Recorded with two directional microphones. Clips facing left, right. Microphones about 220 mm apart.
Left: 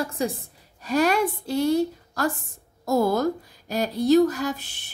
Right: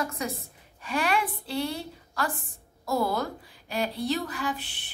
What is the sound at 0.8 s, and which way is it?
Speech, 40° left (ahead or behind).